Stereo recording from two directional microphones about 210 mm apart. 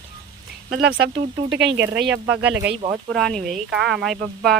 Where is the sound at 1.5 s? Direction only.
60° right (ahead or behind).